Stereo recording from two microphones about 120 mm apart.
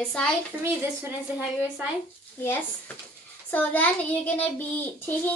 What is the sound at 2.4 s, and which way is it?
A child's voice, 20° left (ahead or behind).